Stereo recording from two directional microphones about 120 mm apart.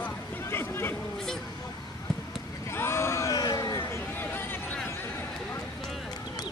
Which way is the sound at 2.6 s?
20° left (ahead or behind).